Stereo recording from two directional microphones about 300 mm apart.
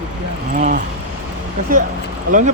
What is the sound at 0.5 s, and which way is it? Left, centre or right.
Speech, right.